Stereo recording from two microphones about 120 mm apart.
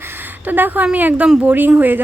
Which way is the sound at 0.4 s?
15° right (ahead or behind).